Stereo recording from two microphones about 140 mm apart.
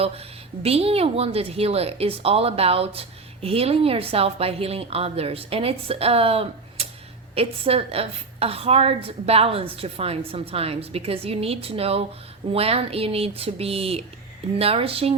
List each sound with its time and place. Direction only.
0.6 s a woman's voice: 45° right (ahead or behind)